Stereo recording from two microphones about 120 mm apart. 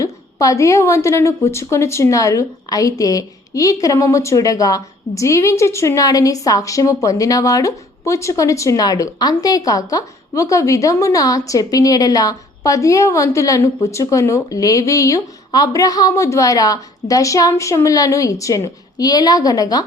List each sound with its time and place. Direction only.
0.0 s a woman's voice: 25° left (ahead or behind)